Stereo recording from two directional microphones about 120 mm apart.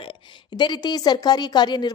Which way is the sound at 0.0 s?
40° left (ahead or behind).